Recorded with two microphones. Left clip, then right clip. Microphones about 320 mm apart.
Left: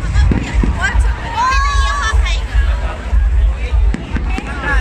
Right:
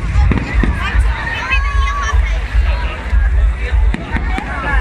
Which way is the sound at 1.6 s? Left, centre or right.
Left.